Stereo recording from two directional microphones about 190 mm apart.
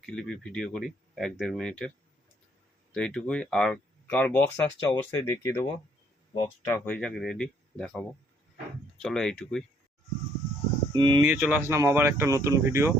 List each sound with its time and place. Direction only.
0.0 s speech: 5° left (ahead or behind)
2.9 s speech: 5° left (ahead or behind)
10.9 s speech: 25° right (ahead or behind)
11.2 s speech: 10° right (ahead or behind)